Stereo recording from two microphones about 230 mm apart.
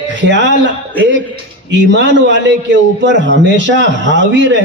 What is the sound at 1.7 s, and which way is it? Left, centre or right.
A man's voice, right.